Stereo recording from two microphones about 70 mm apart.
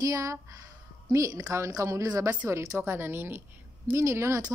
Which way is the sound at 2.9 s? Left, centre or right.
Right.